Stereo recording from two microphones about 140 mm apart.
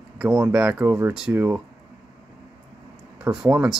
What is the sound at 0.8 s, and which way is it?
Speech, 15° right (ahead or behind).